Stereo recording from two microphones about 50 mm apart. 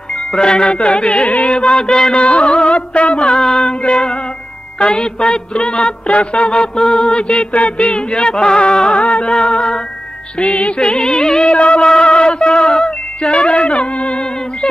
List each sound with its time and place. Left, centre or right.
0.1 s speech: centre
1.0 s music: left
1.6 s music: centre
2.2 s music: left
9.3 s music: centre
10.4 s music: left
10.8 s music: centre
11.9 s speech: centre